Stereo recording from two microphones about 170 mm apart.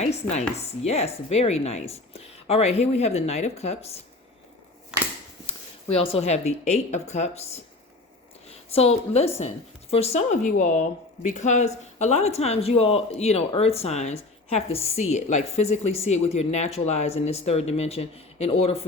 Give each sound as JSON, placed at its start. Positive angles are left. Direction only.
{"t": 0.0, "sound": "a woman's voice", "side_deg": 40}
{"t": 6.0, "sound": "a woman's voice", "side_deg": 35}